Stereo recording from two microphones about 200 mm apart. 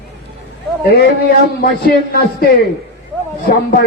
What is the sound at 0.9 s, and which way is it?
A man's voice, 50° left (ahead or behind).